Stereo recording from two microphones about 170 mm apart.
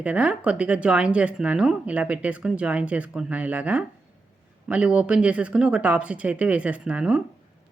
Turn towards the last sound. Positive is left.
turn(degrees=-5)  # may be behind; listen again after turning